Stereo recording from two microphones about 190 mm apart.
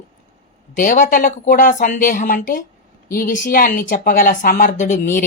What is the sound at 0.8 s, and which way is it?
Speech, 45° left (ahead or behind).